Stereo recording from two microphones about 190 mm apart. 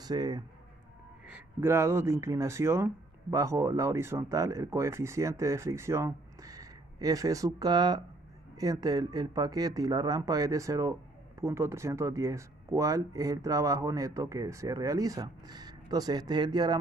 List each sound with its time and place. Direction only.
0.0 s speech: 20° right (ahead or behind)
1.2 s speech: 10° right (ahead or behind)